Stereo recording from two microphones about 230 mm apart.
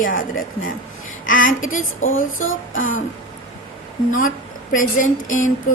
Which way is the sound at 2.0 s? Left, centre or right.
Left.